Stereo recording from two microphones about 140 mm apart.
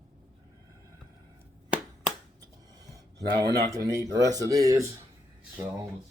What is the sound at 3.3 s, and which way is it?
Speech, 30° right (ahead or behind).